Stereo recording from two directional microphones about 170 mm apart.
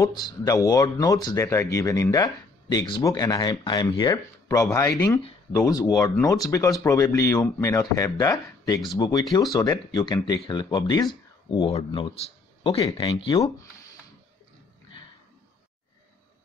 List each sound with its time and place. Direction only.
0.0 s speech: 20° left (ahead or behind)